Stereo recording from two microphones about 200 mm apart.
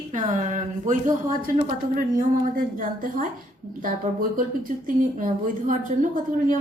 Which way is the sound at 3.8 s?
45° right (ahead or behind).